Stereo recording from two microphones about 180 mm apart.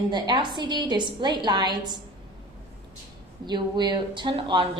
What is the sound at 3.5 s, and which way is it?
A woman's voice, 25° right (ahead or behind).